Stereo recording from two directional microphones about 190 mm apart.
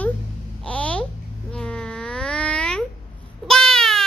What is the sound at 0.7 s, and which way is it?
Babbling, 5° left (ahead or behind).